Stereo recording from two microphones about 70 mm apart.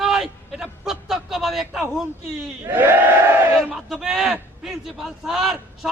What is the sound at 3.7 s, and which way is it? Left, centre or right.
Speech, centre.